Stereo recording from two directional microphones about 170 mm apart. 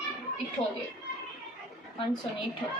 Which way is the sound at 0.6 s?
20° left (ahead or behind).